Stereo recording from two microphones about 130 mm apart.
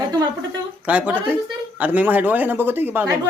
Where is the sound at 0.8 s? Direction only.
10° right (ahead or behind).